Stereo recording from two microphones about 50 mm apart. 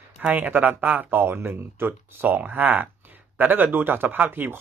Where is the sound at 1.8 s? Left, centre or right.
Right.